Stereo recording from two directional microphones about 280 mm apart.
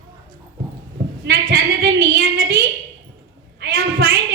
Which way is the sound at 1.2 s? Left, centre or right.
Right.